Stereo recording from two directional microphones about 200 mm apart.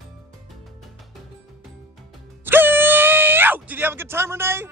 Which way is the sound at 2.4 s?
10° right (ahead or behind).